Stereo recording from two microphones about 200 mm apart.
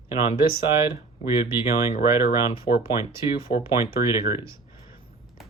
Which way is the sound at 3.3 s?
25° left (ahead or behind).